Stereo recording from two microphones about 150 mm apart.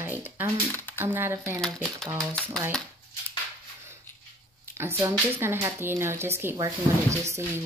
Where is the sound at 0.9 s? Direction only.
15° right (ahead or behind).